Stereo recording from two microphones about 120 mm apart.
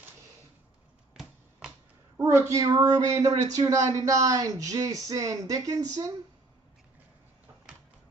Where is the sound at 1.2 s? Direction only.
5° right (ahead or behind).